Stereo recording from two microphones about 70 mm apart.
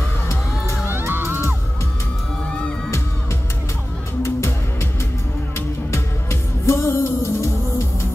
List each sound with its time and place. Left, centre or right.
0.3 s music: left
0.9 s music: right
4.2 s music: left
6.6 s music: left